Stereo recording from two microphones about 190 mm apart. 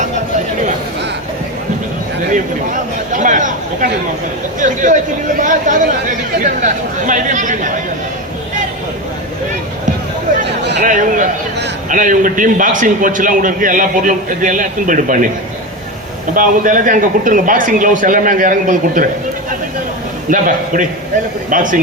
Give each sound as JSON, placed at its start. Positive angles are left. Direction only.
{"t": 3.1, "sound": "a sound", "side_deg": -40}
{"t": 4.6, "sound": "a man's voice", "side_deg": -45}
{"t": 7.1, "sound": "speech", "side_deg": -40}
{"t": 10.8, "sound": "a man's voice", "side_deg": -45}
{"t": 16.3, "sound": "a man's voice", "side_deg": -45}
{"t": 20.3, "sound": "a man's voice", "side_deg": -45}
{"t": 21.5, "sound": "a man's voice", "side_deg": -45}